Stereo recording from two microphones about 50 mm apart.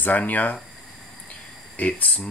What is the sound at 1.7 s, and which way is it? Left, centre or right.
Speech, left.